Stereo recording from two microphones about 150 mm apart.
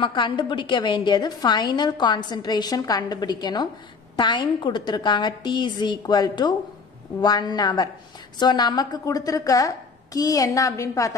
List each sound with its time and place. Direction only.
0.0 s a woman's voice: 30° left (ahead or behind)